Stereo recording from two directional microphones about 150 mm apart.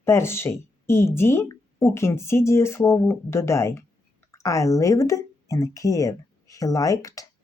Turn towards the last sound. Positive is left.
turn(degrees=20)  # may be behind; listen again after turning